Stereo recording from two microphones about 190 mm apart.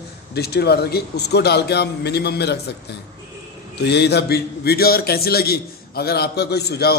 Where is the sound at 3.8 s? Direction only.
60° left (ahead or behind).